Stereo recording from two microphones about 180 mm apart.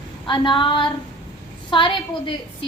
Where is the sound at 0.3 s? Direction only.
25° left (ahead or behind).